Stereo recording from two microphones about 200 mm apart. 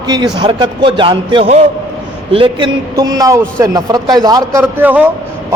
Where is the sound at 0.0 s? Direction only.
20° right (ahead or behind).